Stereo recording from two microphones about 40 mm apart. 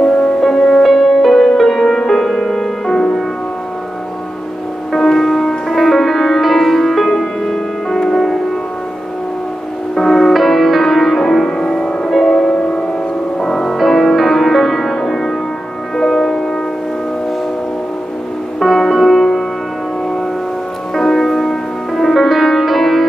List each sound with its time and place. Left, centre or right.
0.0 s music: centre
4.9 s music: centre
9.9 s music: centre
18.6 s music: centre
20.9 s music: centre